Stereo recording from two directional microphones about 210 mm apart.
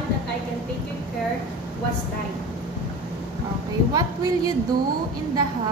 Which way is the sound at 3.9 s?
20° right (ahead or behind).